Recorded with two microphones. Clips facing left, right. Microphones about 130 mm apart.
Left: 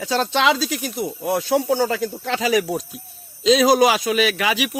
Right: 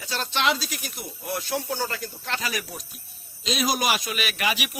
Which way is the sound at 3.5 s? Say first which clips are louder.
Left 10 dB; 90° left.